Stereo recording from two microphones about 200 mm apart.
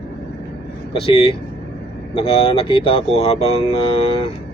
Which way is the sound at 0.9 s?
25° left (ahead or behind).